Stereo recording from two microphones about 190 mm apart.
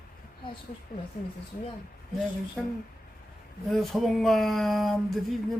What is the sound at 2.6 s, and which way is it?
Speech, centre (ahead or behind).